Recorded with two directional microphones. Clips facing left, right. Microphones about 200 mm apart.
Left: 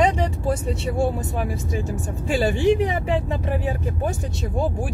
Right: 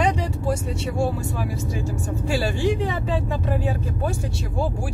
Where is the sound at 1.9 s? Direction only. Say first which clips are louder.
Right 1 dB; 20° left (ahead or behind).